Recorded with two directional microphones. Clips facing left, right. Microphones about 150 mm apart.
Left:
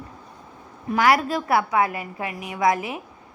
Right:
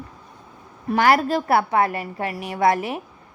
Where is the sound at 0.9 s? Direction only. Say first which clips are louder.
Right 2 dB; 35° right (ahead or behind).